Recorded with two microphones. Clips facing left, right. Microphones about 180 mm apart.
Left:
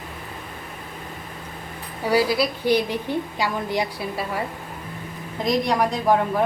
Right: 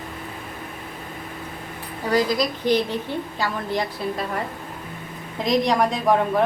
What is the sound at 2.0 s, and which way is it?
A woman's voice, 10° left (ahead or behind).